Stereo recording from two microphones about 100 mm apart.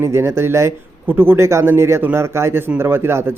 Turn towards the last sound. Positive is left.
turn(degrees=-25)  # may be behind; listen again after turning